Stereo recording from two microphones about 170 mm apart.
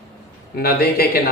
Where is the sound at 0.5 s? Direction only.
65° left (ahead or behind).